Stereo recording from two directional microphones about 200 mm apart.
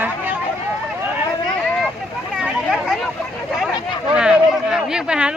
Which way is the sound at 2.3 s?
5° right (ahead or behind).